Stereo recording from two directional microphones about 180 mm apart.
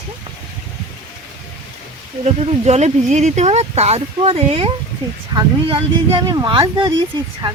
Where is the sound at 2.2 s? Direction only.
35° right (ahead or behind).